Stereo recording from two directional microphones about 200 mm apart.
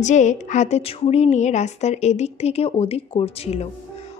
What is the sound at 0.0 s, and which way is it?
A woman's voice, 35° left (ahead or behind).